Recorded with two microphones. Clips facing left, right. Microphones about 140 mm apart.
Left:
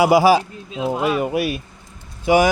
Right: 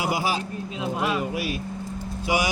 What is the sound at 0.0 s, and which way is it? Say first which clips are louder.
Speech: left 12 dB; 85° left.